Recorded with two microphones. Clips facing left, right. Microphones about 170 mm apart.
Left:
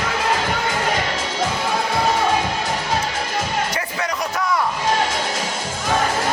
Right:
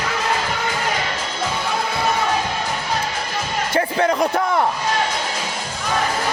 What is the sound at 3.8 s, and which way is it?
Music, 30° right (ahead or behind).